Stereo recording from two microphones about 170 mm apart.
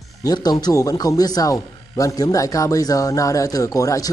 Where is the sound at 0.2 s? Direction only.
25° left (ahead or behind).